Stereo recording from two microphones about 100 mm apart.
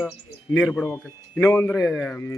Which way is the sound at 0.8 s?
15° left (ahead or behind).